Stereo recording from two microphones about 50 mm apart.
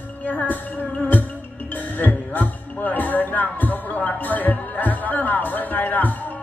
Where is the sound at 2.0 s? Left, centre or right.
Left.